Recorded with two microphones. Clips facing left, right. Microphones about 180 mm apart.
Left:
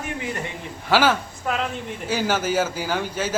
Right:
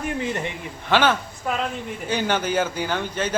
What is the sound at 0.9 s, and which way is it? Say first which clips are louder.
A man's voice: left 1 dB; 5° left (ahead or behind).